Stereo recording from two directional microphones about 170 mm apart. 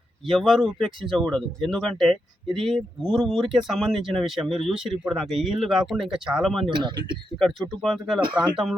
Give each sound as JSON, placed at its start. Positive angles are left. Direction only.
{"t": 0.3, "sound": "speech", "side_deg": 0}
{"t": 6.7, "sound": "speech", "side_deg": -25}
{"t": 7.3, "sound": "speech", "side_deg": 0}